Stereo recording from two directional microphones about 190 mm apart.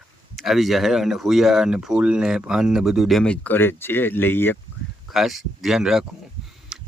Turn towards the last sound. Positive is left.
turn(degrees=-5)  # may be behind; listen again after turning